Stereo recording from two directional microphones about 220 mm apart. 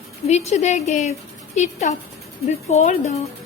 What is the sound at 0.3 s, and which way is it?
A woman's voice, 30° left (ahead or behind).